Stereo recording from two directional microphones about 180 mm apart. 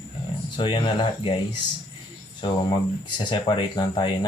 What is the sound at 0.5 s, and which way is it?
Speech, 25° left (ahead or behind).